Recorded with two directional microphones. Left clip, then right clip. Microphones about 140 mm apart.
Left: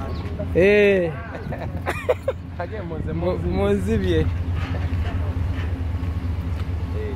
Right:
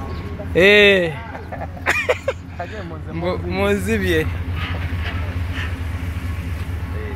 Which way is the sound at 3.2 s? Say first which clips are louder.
Right 3 dB; 15° left (ahead or behind).